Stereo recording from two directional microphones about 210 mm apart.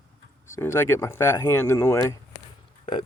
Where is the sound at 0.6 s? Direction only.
10° left (ahead or behind).